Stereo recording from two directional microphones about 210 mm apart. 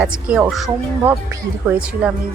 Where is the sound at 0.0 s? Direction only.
5° right (ahead or behind).